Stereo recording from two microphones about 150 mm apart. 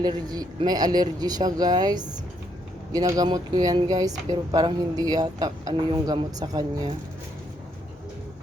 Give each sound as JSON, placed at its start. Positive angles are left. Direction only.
{"t": 0.0, "sound": "speech", "side_deg": -25}